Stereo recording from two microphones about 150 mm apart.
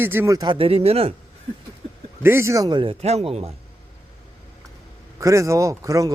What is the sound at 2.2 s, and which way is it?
Speech, 15° right (ahead or behind).